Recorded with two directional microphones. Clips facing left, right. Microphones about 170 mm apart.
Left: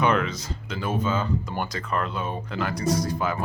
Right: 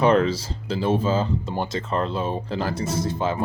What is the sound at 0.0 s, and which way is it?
Speech, 30° right (ahead or behind).